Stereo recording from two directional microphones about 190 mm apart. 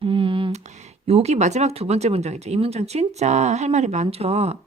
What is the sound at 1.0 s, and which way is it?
Speech, 35° right (ahead or behind).